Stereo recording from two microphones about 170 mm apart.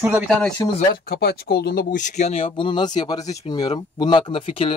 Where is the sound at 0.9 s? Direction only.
65° left (ahead or behind).